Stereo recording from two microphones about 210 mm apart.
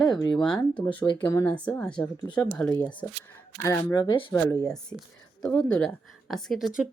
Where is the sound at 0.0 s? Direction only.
20° left (ahead or behind).